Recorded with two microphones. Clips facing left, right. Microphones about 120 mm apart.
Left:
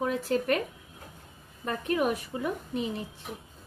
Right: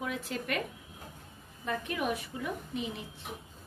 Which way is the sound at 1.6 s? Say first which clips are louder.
Left 5 dB; 45° left (ahead or behind).